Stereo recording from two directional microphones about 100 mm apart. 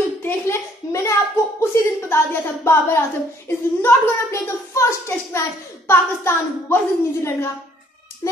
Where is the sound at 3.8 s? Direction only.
25° left (ahead or behind).